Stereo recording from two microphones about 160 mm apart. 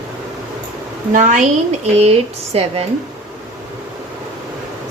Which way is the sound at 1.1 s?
50° right (ahead or behind).